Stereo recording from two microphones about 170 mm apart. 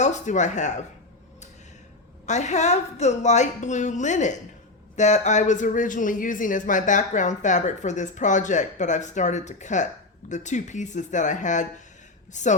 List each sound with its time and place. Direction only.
0.0 s speech: 45° left (ahead or behind)
2.2 s speech: 45° left (ahead or behind)